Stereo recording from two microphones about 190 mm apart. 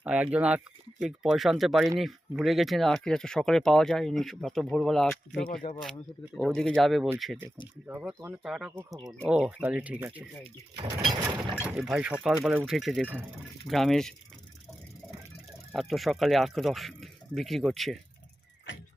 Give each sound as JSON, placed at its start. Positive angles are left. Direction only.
{"t": 0.0, "sound": "speech", "side_deg": -5}
{"t": 10.4, "sound": "speech", "side_deg": -20}
{"t": 11.6, "sound": "speech", "side_deg": -5}
{"t": 15.7, "sound": "speech", "side_deg": 0}